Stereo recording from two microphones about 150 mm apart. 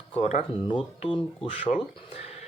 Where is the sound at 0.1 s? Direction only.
50° left (ahead or behind).